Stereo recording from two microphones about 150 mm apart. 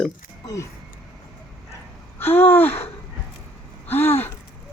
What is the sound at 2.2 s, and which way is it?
Speech, 15° left (ahead or behind).